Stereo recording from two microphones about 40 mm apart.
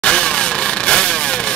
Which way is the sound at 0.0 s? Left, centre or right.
Left.